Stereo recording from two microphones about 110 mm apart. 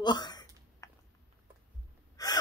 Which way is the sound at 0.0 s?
40° left (ahead or behind).